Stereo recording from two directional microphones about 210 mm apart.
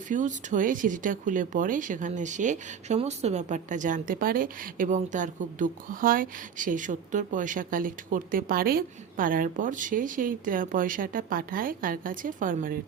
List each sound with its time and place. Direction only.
0.1 s speech: 40° right (ahead or behind)